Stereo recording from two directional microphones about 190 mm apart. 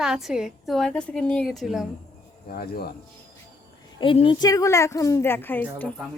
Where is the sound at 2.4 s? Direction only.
50° left (ahead or behind).